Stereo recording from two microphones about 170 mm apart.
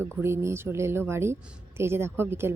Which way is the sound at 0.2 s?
15° right (ahead or behind).